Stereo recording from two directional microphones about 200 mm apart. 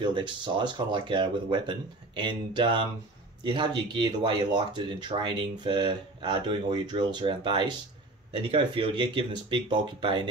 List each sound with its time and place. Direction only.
0.0 s speech: 25° right (ahead or behind)